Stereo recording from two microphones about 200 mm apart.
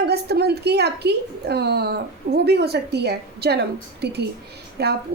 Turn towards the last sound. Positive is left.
turn(degrees=-55)  # may be behind; listen again after turning